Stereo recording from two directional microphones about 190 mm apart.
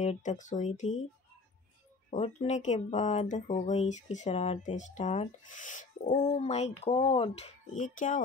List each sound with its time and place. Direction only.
0.0 s speech: 40° left (ahead or behind)
2.0 s speech: 35° left (ahead or behind)